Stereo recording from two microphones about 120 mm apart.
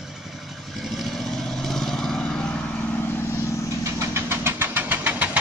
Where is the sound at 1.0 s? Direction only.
Centre (ahead or behind).